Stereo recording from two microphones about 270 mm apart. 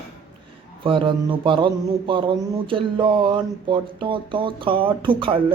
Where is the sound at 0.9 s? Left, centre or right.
Centre.